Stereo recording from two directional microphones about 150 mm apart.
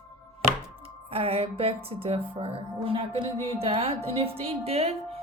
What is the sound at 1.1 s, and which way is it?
A woman's voice, 40° right (ahead or behind).